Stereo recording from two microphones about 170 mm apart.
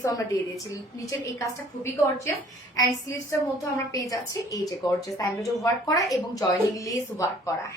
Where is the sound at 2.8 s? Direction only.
20° left (ahead or behind).